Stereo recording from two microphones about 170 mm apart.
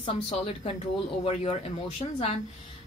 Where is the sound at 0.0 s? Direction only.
35° left (ahead or behind).